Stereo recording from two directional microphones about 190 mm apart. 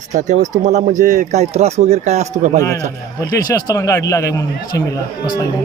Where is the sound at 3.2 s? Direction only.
20° left (ahead or behind).